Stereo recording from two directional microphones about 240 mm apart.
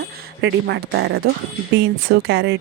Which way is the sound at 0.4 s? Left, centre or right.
Right.